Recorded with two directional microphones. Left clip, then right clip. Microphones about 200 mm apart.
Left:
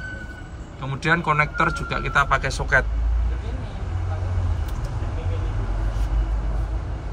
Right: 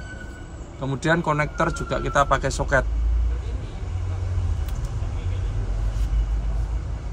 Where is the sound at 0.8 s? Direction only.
20° right (ahead or behind).